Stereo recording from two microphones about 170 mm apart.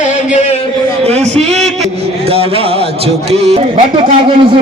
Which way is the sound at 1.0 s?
40° right (ahead or behind).